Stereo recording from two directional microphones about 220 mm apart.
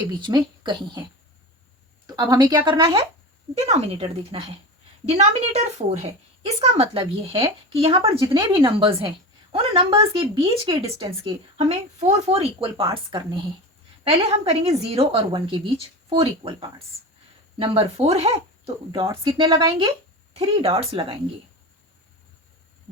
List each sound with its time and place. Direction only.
0.2 s speech: 20° right (ahead or behind)
2.1 s a woman's voice: 15° right (ahead or behind)
4.3 s a woman's voice: 25° right (ahead or behind)
11.5 s a woman's voice: 30° right (ahead or behind)